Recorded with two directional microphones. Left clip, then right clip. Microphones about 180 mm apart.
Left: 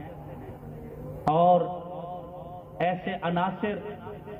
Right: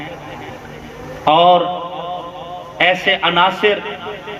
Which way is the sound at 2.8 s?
50° left (ahead or behind).